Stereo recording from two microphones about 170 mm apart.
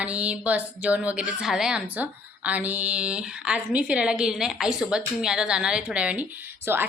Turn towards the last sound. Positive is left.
turn(degrees=-10)  # may be behind; listen again after turning